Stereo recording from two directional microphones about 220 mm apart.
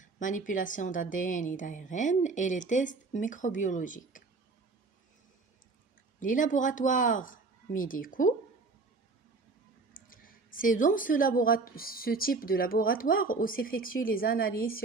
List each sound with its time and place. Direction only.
0.0 s speech: 35° left (ahead or behind)
6.1 s speech: 35° left (ahead or behind)
9.9 s speech: 40° left (ahead or behind)